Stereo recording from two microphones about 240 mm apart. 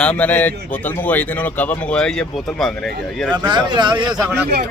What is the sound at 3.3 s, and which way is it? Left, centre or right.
Speech, centre.